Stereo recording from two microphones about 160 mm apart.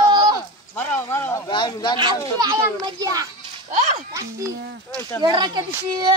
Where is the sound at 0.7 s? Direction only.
10° left (ahead or behind).